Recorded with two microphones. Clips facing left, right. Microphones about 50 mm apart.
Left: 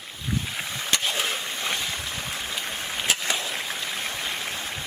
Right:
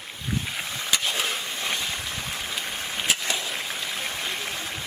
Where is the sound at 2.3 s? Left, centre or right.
Centre.